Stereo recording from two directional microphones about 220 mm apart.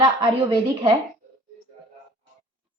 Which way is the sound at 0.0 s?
20° right (ahead or behind).